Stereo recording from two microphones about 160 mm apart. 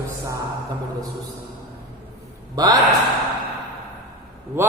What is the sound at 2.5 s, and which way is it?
Speech, 25° right (ahead or behind).